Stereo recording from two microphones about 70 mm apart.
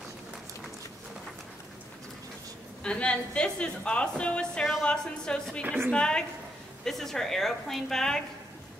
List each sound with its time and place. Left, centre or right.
2.8 s a woman's voice: centre